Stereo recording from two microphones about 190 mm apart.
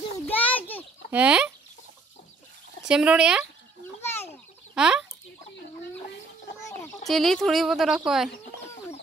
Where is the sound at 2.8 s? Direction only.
5° right (ahead or behind).